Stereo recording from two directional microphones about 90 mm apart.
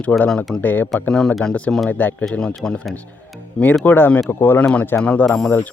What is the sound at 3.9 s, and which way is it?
Speech, 20° left (ahead or behind).